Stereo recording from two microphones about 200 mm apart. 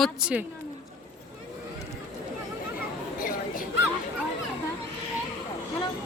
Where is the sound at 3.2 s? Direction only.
45° left (ahead or behind).